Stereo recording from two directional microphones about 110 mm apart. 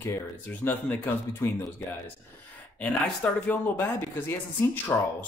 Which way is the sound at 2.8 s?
10° left (ahead or behind).